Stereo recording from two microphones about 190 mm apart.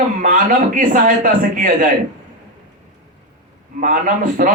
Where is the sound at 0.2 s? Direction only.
45° right (ahead or behind).